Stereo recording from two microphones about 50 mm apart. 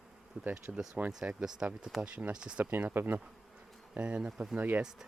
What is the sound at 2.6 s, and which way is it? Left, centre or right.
Speech, right.